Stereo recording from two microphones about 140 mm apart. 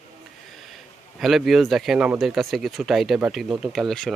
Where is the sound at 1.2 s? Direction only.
Centre (ahead or behind).